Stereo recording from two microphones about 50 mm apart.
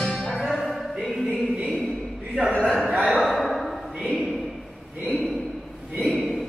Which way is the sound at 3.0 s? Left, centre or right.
Centre.